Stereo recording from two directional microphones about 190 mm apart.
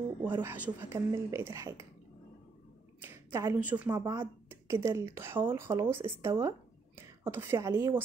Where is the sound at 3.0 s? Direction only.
15° right (ahead or behind).